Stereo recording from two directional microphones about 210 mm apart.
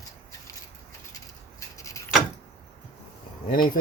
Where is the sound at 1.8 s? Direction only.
15° left (ahead or behind).